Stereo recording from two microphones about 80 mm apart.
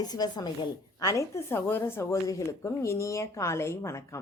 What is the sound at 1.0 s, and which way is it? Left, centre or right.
Speech, left.